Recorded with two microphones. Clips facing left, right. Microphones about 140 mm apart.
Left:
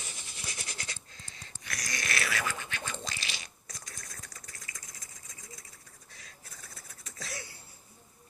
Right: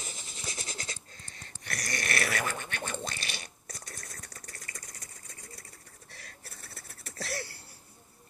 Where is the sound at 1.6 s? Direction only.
60° right (ahead or behind); by 7.6 s 75° right (ahead or behind).